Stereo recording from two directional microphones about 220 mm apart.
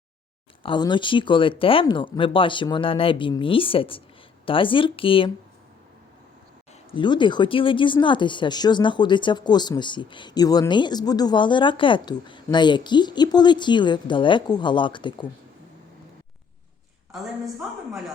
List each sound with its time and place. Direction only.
0.6 s speech: 20° left (ahead or behind)
6.9 s speech: 20° left (ahead or behind)
17.1 s a woman's voice: centre (ahead or behind)